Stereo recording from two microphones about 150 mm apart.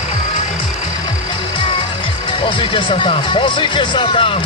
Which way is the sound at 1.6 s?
35° left (ahead or behind).